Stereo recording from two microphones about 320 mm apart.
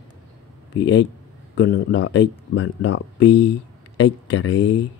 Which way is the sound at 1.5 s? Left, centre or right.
Left.